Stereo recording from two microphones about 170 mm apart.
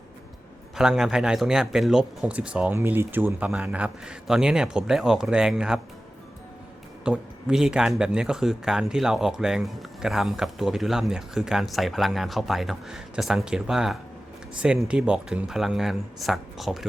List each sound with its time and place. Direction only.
0.8 s speech: centre (ahead or behind)
7.0 s speech: 5° right (ahead or behind)